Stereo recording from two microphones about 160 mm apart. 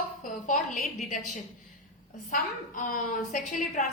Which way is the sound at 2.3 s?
60° left (ahead or behind).